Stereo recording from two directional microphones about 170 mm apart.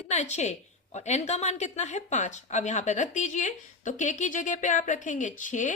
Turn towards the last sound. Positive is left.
turn(degrees=50)  # may be behind; listen again after turning